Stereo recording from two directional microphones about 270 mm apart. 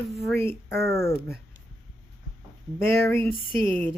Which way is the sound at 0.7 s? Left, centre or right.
Right.